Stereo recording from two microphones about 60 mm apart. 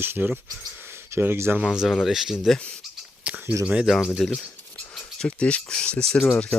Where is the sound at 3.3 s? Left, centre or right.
Right.